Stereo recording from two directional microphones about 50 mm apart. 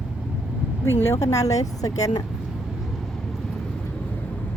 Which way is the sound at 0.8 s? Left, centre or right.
Left.